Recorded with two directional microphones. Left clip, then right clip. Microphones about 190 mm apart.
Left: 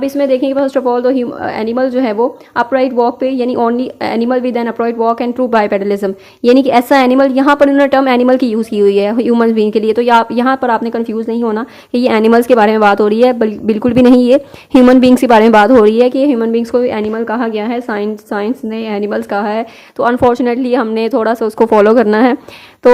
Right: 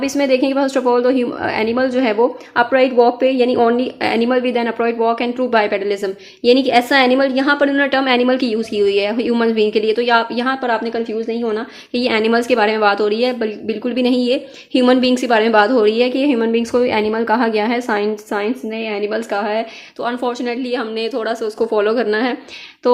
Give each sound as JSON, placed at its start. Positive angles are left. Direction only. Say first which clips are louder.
{"t": 0.0, "sound": "a woman's voice", "louder": "left 3 dB", "side_deg": 25}